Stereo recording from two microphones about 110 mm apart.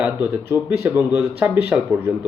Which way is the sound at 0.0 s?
15° right (ahead or behind).